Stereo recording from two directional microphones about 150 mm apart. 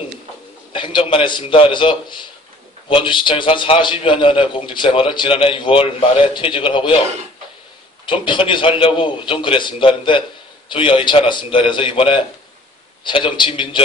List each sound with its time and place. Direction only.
0.7 s a man's voice: 35° left (ahead or behind)
8.1 s a man's voice: 35° left (ahead or behind)